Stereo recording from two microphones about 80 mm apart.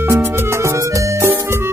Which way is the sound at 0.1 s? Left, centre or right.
Right.